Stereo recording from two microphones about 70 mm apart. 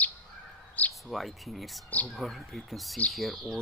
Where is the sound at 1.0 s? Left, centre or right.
Centre.